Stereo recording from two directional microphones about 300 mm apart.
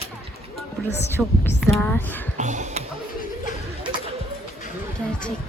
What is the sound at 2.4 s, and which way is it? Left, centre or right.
Music, right.